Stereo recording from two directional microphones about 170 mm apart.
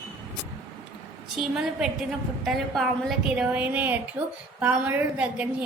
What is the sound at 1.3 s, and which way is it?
A woman's voice, 5° right (ahead or behind).